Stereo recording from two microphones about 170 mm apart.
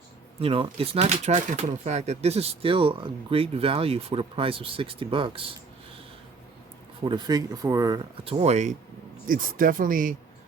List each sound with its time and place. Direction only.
0.3 s speech: 35° right (ahead or behind)
7.0 s speech: 25° right (ahead or behind)
8.2 s speech: 35° right (ahead or behind)
9.2 s speech: 55° right (ahead or behind)